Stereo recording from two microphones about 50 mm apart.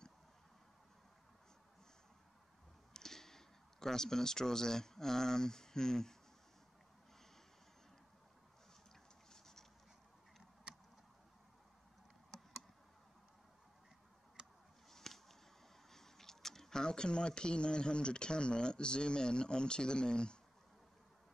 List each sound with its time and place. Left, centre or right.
2.9 s speech: centre
14.9 s a sound: centre
15.9 s speech: centre